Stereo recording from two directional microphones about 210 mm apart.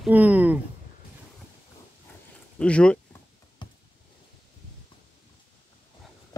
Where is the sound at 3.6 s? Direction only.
20° left (ahead or behind).